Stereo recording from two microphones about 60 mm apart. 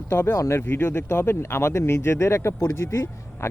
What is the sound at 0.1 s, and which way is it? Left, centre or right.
Speech, left.